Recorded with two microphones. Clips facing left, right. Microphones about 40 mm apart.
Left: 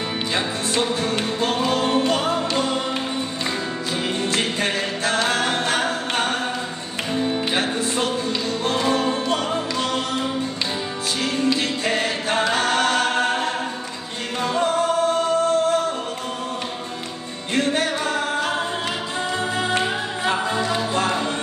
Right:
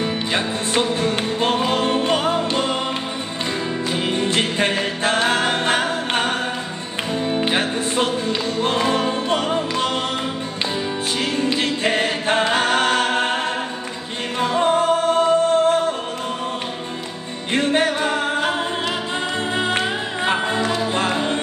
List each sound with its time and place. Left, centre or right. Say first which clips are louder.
0.3 s music: even; right
3.9 s music: right 2 dB; right
7.3 s music: right 2 dB; right
11.3 s a capella: left 1 dB; right
14.4 s music: right 3 dB; right
17.5 s music: right 3 dB; right
19.5 s music: right 2 dB; right